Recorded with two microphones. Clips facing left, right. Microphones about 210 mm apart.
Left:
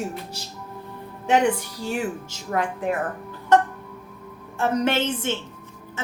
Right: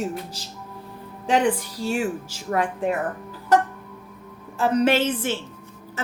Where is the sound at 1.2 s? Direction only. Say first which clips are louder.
Left 1 dB; 35° right (ahead or behind).